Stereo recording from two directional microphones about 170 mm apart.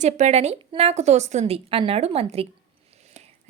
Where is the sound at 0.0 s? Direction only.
40° right (ahead or behind).